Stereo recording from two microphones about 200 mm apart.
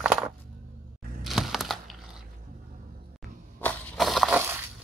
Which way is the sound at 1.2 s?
Centre (ahead or behind).